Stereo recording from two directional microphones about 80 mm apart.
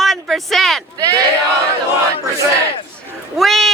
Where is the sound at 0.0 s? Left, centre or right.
Centre.